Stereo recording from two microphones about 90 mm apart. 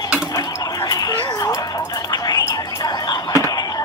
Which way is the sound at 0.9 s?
45° left (ahead or behind).